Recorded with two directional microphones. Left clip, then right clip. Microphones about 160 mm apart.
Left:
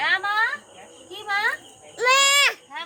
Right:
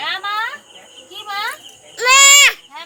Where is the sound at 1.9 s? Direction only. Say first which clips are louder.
Right 8 dB; 40° left (ahead or behind).